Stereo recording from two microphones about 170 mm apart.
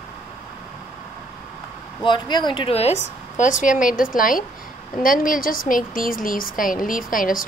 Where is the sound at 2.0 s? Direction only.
25° left (ahead or behind).